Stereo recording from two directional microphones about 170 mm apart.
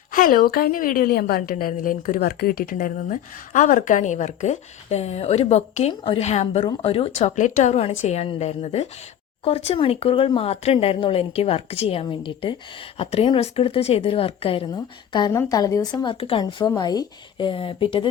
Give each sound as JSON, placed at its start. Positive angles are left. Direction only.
{"t": 0.1, "sound": "a woman's voice", "side_deg": 55}
{"t": 6.7, "sound": "speech", "side_deg": 35}